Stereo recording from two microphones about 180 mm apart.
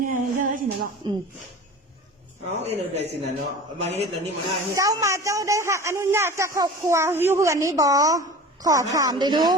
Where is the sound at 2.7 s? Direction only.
35° right (ahead or behind).